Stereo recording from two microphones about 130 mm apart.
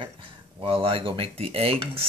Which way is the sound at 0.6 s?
45° right (ahead or behind).